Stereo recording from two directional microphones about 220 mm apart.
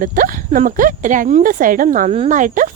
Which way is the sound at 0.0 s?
40° right (ahead or behind).